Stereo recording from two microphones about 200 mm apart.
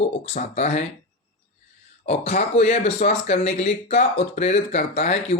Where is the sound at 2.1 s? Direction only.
35° left (ahead or behind).